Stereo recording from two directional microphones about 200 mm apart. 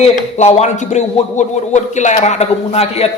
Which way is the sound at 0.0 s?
35° left (ahead or behind).